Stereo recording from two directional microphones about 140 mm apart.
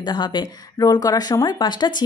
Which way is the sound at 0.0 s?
30° left (ahead or behind).